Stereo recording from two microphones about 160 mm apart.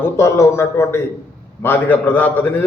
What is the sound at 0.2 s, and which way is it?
A man's voice, 20° left (ahead or behind).